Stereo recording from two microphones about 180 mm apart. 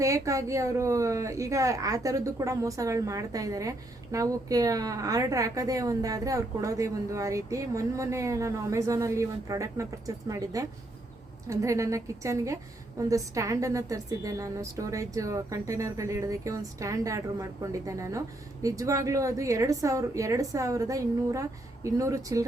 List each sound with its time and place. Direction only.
0.0 s a woman's voice: 20° right (ahead or behind)